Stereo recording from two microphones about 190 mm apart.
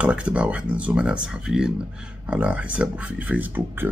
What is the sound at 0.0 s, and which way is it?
Speech, 5° right (ahead or behind).